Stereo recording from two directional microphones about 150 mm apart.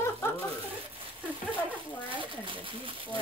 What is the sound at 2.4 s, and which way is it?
Speech, 35° right (ahead or behind).